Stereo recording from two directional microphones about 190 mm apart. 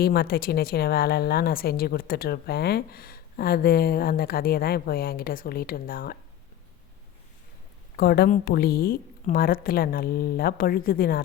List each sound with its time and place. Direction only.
0.0 s a woman's voice: 55° left (ahead or behind)
7.9 s a woman's voice: 55° left (ahead or behind)